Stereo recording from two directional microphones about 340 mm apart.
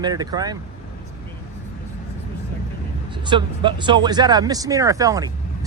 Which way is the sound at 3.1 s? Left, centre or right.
Centre.